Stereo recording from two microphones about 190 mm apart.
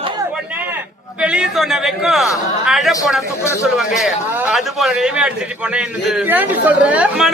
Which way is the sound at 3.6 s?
Centre (ahead or behind).